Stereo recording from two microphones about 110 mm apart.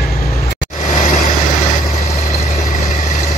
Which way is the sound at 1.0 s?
90° left.